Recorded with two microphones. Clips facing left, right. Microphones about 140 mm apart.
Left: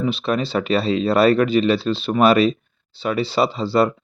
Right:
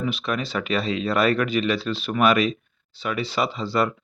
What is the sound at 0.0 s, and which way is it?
Speech, 30° left (ahead or behind).